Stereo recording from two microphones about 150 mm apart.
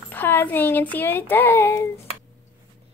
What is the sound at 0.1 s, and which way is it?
Speech, 15° left (ahead or behind).